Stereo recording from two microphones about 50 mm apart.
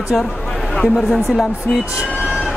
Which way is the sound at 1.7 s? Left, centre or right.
Centre.